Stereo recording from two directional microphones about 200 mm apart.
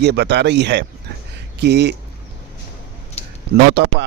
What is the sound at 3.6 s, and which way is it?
Speech, 60° right (ahead or behind).